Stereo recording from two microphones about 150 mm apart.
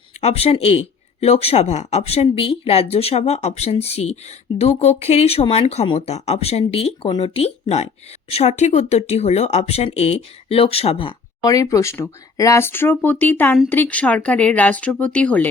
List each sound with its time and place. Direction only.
0.2 s speech: 45° left (ahead or behind)
11.4 s speech: 20° left (ahead or behind)